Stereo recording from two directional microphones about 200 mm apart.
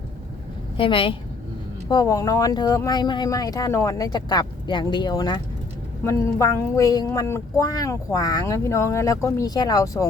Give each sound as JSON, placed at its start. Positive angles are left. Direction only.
{"t": 0.8, "sound": "speech", "side_deg": 25}